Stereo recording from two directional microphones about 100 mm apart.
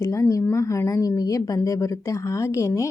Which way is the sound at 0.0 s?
35° left (ahead or behind).